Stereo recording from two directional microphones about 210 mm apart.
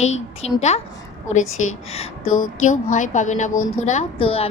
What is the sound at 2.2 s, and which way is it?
Speech, 80° left.